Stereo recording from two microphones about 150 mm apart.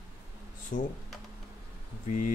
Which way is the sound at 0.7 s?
60° left (ahead or behind).